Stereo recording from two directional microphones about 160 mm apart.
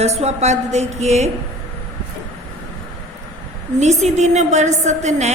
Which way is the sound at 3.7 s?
45° right (ahead or behind).